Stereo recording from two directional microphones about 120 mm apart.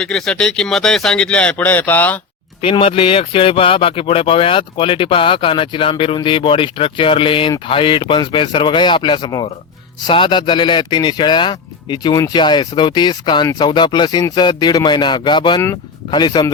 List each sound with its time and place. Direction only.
0.0 s speech: 5° left (ahead or behind)
2.6 s speech: 50° left (ahead or behind)